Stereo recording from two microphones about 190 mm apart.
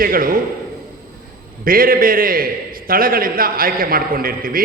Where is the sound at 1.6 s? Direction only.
50° right (ahead or behind).